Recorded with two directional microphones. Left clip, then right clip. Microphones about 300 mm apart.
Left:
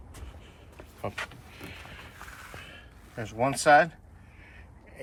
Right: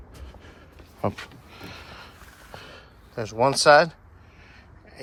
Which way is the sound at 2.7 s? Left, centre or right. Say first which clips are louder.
Right 2 dB; centre.